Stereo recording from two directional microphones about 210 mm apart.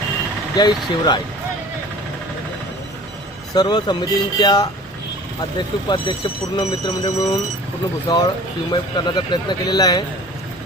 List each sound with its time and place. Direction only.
0.5 s speech: 20° left (ahead or behind)
3.5 s speech: 20° left (ahead or behind)
5.9 s speech: 20° left (ahead or behind)